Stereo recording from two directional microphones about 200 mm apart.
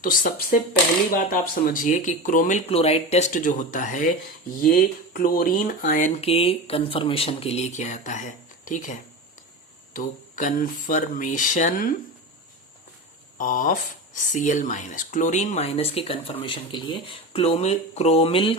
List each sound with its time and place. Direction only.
0.0 s speech: 45° left (ahead or behind)
13.4 s speech: 40° left (ahead or behind)